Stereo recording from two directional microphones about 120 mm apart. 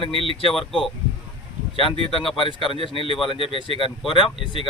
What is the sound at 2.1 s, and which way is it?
Speech, 45° left (ahead or behind).